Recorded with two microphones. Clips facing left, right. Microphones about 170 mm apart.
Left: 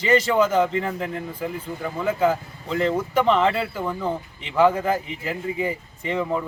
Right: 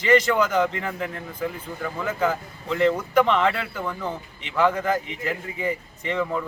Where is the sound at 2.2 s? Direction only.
30° left (ahead or behind).